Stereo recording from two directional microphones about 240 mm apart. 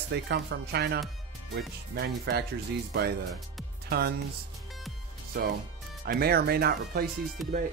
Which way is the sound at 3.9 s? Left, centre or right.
Right.